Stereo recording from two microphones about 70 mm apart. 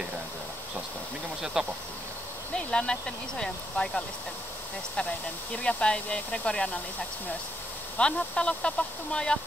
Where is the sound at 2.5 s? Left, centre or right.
Centre.